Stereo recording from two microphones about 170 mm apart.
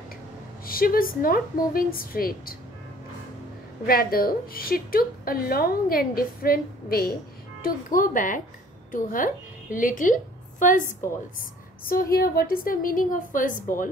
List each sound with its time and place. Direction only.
0.7 s a woman's voice: 60° left (ahead or behind)
3.8 s a woman's voice: 60° left (ahead or behind)